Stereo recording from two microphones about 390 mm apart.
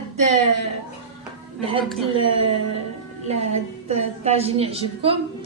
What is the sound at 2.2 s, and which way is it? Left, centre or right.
Speech, centre.